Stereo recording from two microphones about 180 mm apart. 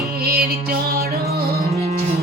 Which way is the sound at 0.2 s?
60° right (ahead or behind).